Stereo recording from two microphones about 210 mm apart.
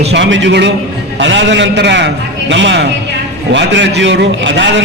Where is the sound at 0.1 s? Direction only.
60° right (ahead or behind).